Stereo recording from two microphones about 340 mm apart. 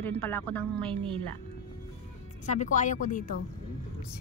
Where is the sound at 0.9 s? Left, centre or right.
Centre.